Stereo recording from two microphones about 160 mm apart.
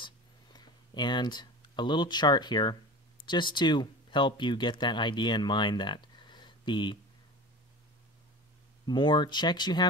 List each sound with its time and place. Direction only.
0.0 s a sound: 25° left (ahead or behind)
3.3 s speech: 30° left (ahead or behind)
8.8 s speech: 30° left (ahead or behind)